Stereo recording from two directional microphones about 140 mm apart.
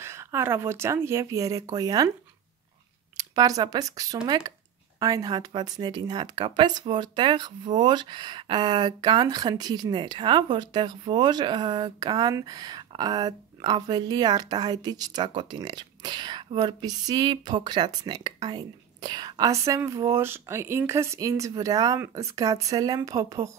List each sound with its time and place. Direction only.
0.0 s speech: 20° right (ahead or behind)
3.2 s speech: 25° right (ahead or behind)